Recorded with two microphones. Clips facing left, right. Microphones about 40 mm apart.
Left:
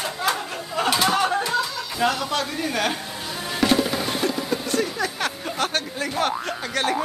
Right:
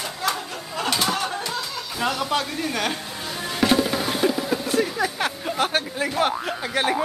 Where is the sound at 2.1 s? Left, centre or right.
Centre.